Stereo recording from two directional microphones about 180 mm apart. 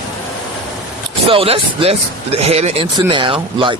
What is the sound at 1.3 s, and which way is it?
Speech, 30° right (ahead or behind).